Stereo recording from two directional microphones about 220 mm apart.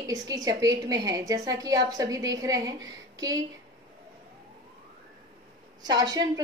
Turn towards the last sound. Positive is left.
turn(degrees=-15)  # may be behind; listen again after turning